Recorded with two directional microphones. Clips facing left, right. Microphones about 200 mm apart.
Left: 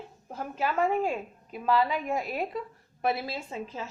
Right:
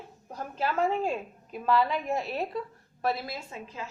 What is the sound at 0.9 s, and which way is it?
A woman's voice, 10° left (ahead or behind).